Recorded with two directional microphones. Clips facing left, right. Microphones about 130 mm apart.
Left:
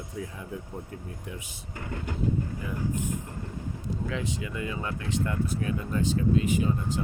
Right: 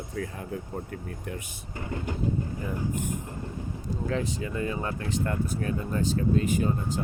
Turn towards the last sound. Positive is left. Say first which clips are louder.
# even
turn(degrees=-45)  # may be behind; listen again after turning